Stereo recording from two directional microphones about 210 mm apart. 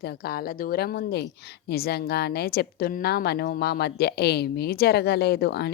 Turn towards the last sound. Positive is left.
turn(degrees=50)  # may be behind; listen again after turning